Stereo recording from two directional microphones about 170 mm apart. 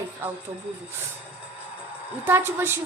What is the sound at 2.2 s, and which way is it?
Speech, 15° right (ahead or behind).